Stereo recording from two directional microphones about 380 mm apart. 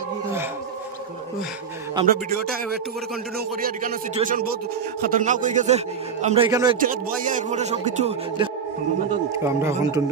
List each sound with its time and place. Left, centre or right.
2.0 s a man's voice: right
3.6 s a man's voice: centre
6.8 s speech: right